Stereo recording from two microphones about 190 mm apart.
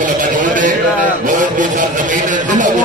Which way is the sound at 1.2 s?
45° right (ahead or behind).